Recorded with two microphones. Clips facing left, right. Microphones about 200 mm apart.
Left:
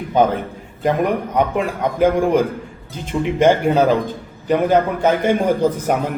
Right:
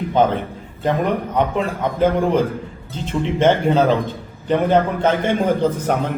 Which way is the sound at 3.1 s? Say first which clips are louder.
Left 2 dB; 10° left (ahead or behind).